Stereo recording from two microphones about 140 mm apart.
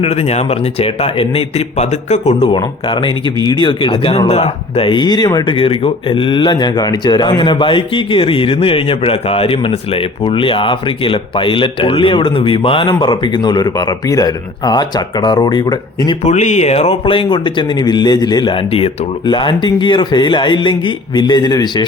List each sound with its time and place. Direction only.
0.0 s a man's voice: 50° left (ahead or behind)
2.5 s speech: 35° left (ahead or behind)
5.5 s speech: 40° left (ahead or behind)
16.2 s speech: 55° left (ahead or behind); by 21.8 s 30° left (ahead or behind)